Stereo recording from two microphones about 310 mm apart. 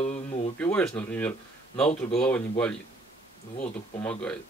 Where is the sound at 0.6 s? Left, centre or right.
Centre.